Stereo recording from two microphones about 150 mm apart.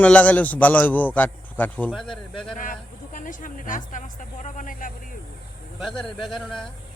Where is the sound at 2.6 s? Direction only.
60° left (ahead or behind).